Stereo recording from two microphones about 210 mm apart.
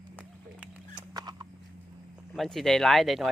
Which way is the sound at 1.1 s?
20° right (ahead or behind).